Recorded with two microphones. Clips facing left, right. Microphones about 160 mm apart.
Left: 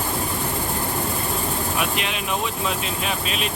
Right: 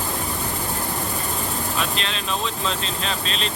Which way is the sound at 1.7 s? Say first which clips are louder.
Left 1 dB; 15° left (ahead or behind).